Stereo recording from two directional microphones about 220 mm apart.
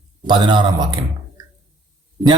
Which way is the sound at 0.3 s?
20° right (ahead or behind).